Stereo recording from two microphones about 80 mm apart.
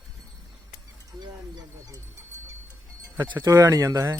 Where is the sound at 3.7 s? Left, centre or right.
Right.